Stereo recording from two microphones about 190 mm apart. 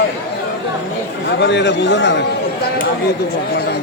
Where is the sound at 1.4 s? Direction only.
65° left (ahead or behind).